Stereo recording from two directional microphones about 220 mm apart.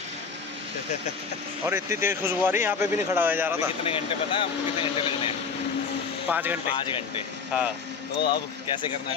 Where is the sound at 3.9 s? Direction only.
25° left (ahead or behind).